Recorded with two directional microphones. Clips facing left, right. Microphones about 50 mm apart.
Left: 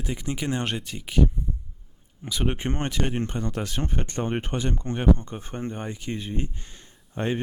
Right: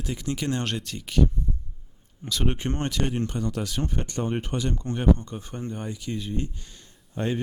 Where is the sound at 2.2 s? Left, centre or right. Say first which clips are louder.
Even; centre.